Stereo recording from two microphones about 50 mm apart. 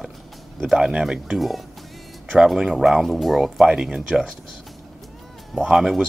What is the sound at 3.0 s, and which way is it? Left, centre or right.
Speech, centre.